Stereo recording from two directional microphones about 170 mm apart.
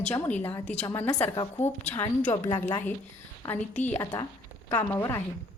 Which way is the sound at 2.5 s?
25° left (ahead or behind).